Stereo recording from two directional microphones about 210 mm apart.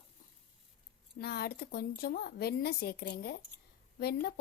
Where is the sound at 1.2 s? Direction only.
50° left (ahead or behind).